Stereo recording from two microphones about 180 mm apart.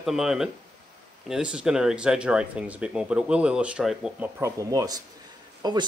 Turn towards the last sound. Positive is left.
turn(degrees=-20)  # may be behind; listen again after turning